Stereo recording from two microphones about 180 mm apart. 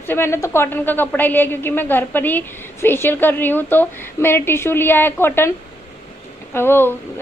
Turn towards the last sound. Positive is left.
turn(degrees=10)  # may be behind; listen again after turning